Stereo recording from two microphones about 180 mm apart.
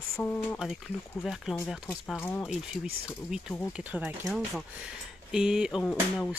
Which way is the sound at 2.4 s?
Centre (ahead or behind).